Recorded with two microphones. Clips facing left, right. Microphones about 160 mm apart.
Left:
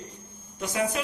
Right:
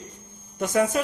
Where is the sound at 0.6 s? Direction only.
50° right (ahead or behind).